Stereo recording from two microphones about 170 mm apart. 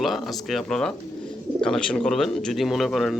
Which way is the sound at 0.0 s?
Centre (ahead or behind).